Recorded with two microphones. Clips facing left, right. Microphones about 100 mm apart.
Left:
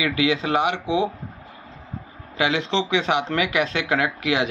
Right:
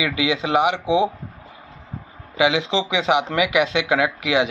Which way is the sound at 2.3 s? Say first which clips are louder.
Right 3 dB; 15° right (ahead or behind).